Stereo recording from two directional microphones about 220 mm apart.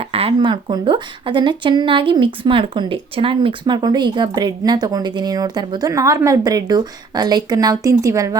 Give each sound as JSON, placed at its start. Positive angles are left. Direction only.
{"t": 0.0, "sound": "speech", "side_deg": -25}